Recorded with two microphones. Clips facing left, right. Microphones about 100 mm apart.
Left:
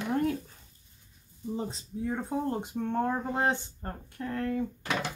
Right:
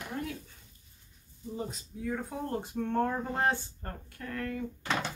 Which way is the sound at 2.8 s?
15° left (ahead or behind).